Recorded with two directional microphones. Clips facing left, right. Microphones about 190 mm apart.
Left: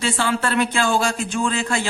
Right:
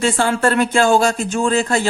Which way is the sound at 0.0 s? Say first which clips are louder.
Right 5 dB; 45° right (ahead or behind).